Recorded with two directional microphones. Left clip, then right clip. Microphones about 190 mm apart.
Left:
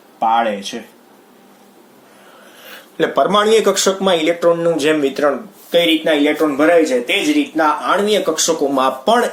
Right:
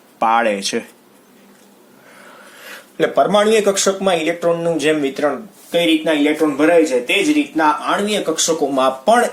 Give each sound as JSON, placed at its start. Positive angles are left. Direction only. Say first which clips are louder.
{"t": 0.2, "sound": "speech", "louder": "even", "side_deg": -50}
{"t": 3.0, "sound": "a man's voice", "louder": "even", "side_deg": -10}